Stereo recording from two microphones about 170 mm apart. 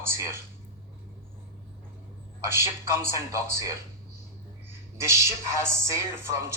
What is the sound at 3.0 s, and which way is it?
Speech, 15° right (ahead or behind).